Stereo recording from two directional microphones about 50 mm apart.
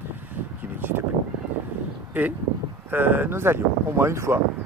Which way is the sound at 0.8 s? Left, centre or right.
Right.